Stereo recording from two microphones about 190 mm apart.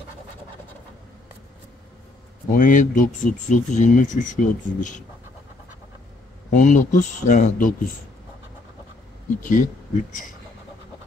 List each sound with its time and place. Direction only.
2.5 s speech: 45° left (ahead or behind)
6.5 s speech: 40° left (ahead or behind)
9.4 s speech: 45° left (ahead or behind)